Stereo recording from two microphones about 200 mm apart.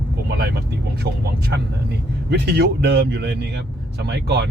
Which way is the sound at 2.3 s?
55° right (ahead or behind).